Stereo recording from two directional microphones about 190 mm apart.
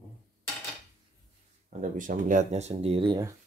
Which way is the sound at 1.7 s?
40° right (ahead or behind).